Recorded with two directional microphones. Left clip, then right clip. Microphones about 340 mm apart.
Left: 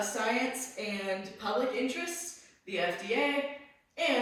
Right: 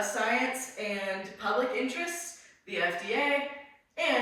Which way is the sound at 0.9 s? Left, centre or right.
Right.